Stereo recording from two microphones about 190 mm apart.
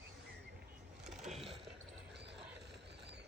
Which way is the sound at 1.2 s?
35° right (ahead or behind).